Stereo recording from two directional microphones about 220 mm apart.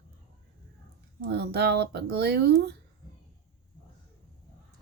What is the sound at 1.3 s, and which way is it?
Speech, 50° right (ahead or behind).